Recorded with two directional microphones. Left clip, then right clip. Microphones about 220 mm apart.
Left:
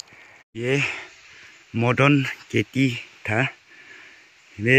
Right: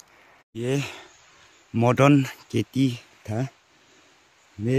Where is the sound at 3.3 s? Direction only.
25° left (ahead or behind).